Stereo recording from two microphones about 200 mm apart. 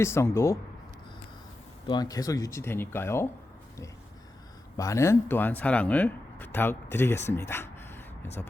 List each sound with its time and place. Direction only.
0.0 s speech: 15° left (ahead or behind)
1.9 s speech: 20° left (ahead or behind)
4.8 s speech: 15° left (ahead or behind)
7.3 s a sound: 10° left (ahead or behind)